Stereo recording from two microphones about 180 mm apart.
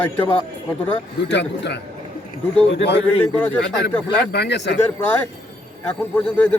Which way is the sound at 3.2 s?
10° left (ahead or behind).